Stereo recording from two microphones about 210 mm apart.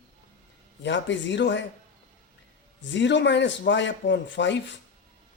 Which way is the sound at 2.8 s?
60° left (ahead or behind).